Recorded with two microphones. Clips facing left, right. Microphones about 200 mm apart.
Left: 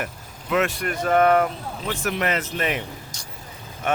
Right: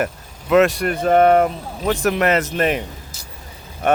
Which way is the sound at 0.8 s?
30° right (ahead or behind).